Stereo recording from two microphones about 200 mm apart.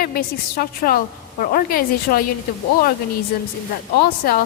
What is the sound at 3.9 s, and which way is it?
Speech, 50° left (ahead or behind).